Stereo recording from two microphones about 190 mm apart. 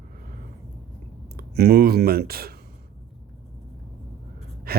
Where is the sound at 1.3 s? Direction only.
55° right (ahead or behind).